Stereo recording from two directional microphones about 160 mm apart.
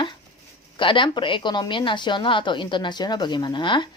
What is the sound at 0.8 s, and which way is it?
Speech, 30° left (ahead or behind).